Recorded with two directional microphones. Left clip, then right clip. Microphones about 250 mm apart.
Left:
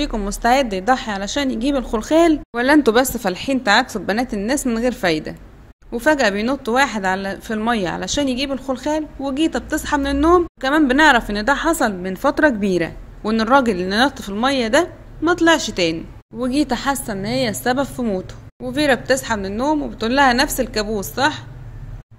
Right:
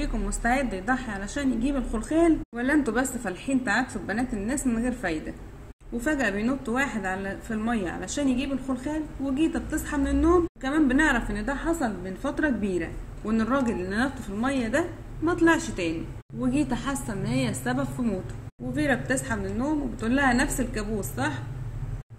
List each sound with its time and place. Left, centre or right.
0.0 s a woman's voice: left